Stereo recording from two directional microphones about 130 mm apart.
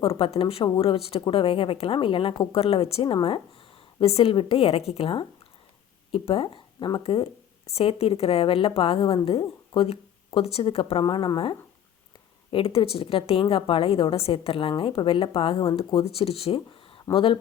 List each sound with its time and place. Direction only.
0.0 s a woman's voice: 45° left (ahead or behind)
11.0 s a woman's voice: 35° left (ahead or behind)
17.1 s speech: 20° left (ahead or behind)